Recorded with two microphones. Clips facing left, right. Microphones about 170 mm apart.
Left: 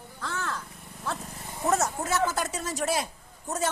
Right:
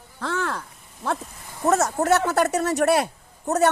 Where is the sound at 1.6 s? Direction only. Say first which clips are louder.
Right 7 dB; 70° right (ahead or behind).